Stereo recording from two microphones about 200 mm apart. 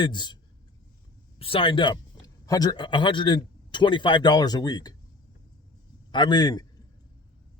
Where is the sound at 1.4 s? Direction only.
25° left (ahead or behind).